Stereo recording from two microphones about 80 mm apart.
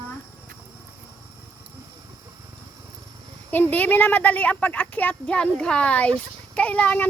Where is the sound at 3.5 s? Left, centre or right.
Left.